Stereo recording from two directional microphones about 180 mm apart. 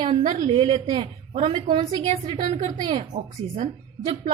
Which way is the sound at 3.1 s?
45° right (ahead or behind).